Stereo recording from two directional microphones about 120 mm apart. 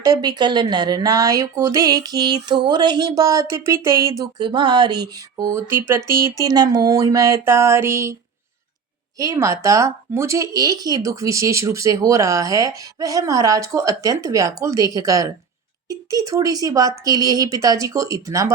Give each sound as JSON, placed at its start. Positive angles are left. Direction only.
{"t": 0.0, "sound": "speech", "side_deg": -35}
{"t": 5.4, "sound": "speech", "side_deg": -20}
{"t": 9.1, "sound": "speech", "side_deg": -25}